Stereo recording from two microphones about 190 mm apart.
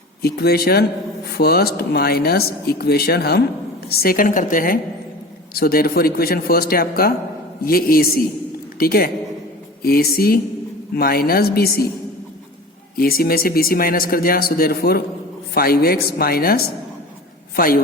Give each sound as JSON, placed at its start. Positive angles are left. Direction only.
{"t": 0.2, "sound": "a man's voice", "side_deg": 55}
{"t": 13.0, "sound": "a man's voice", "side_deg": 50}